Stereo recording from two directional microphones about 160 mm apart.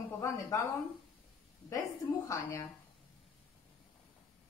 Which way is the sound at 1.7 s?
20° left (ahead or behind).